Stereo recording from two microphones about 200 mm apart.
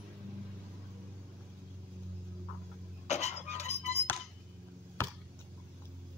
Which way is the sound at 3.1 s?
35° left (ahead or behind).